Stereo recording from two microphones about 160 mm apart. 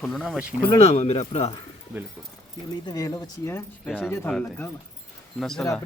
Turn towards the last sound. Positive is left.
turn(degrees=5)  # may be behind; listen again after turning